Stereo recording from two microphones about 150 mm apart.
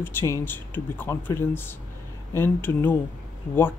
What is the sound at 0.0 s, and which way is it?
Speech, 15° left (ahead or behind).